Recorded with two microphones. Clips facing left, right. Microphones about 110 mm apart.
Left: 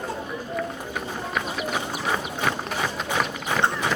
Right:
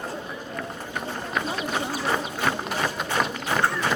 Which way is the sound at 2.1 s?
5° right (ahead or behind).